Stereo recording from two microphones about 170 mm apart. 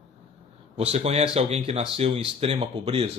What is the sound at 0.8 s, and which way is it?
Speech, 40° right (ahead or behind).